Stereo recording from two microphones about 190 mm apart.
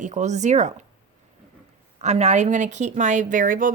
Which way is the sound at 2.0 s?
35° right (ahead or behind).